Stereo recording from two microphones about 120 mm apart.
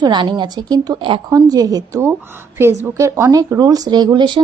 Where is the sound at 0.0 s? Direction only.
40° right (ahead or behind).